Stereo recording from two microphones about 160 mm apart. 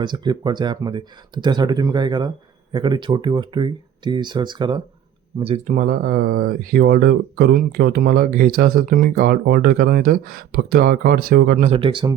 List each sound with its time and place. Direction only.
0.0 s speech: 30° right (ahead or behind)
5.4 s speech: 40° right (ahead or behind); by 11.5 s 65° right (ahead or behind)
11.5 s speech: 45° right (ahead or behind)
11.8 s speech: 30° right (ahead or behind)